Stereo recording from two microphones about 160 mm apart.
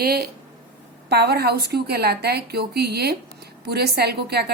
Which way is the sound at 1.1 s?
90° right.